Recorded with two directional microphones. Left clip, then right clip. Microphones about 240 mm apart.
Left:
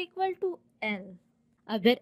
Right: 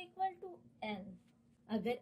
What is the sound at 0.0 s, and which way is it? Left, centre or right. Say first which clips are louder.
A woman's voice: left 10 dB; left.